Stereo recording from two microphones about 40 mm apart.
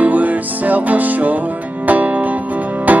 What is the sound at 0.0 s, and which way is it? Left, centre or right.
Music, right.